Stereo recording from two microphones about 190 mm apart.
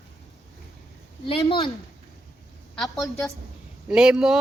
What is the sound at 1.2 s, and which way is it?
Speech, 30° left (ahead or behind).